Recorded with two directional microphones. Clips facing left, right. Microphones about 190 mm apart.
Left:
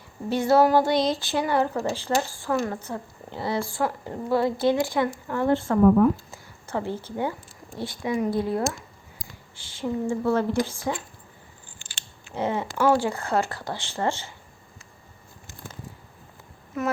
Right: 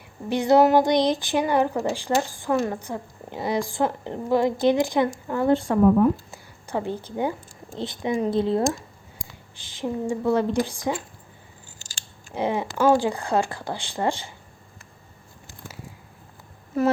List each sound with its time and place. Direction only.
0.3 s speech: 15° right (ahead or behind)
11.8 s biting: 40° right (ahead or behind)
12.3 s speech: 15° right (ahead or behind)
16.7 s humming: 35° right (ahead or behind)